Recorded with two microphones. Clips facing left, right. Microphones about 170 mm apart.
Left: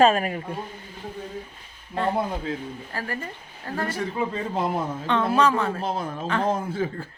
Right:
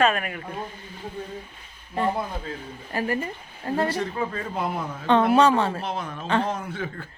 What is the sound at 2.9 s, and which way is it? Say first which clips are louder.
Speech: right 9 dB; 20° right (ahead or behind).